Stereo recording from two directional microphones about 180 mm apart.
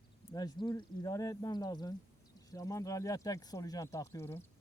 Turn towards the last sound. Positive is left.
turn(degrees=15)  # may be behind; listen again after turning